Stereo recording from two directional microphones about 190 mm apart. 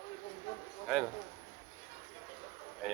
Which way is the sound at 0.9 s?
5° right (ahead or behind).